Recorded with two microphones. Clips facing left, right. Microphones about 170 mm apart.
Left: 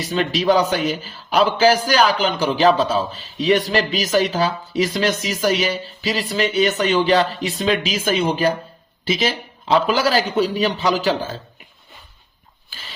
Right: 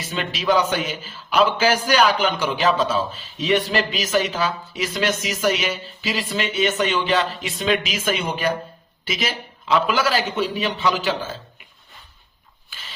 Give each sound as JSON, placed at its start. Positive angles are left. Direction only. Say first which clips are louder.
{"t": 0.1, "sound": "a man's voice", "louder": "left 4 dB", "side_deg": 35}